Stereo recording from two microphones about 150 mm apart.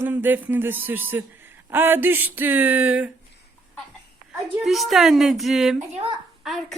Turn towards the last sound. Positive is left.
turn(degrees=0)  # may be behind; listen again after turning